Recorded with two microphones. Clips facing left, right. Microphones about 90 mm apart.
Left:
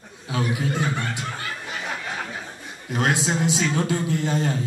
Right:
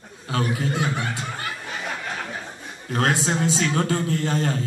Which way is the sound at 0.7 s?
10° right (ahead or behind).